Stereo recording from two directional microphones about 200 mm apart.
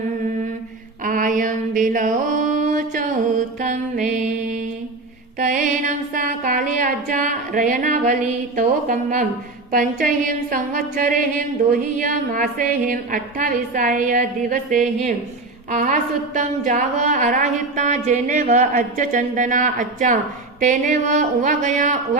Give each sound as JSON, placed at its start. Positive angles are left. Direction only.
{"t": 1.0, "sound": "mantra", "side_deg": -40}
{"t": 5.4, "sound": "music", "side_deg": -40}
{"t": 8.5, "sound": "a woman's voice", "side_deg": -40}
{"t": 9.7, "sound": "a sound", "side_deg": -40}
{"t": 15.7, "sound": "a woman's voice", "side_deg": -40}